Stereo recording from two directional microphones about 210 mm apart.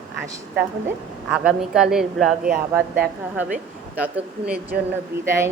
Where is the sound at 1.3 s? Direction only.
5° right (ahead or behind).